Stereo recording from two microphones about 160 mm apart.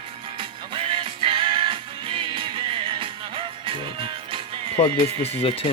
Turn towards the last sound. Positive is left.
turn(degrees=40)  # may be behind; listen again after turning